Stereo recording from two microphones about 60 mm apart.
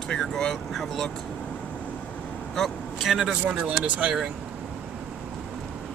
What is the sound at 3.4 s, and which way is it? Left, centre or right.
Speech, right.